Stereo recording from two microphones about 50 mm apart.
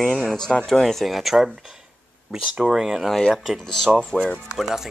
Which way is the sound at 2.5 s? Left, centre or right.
Centre.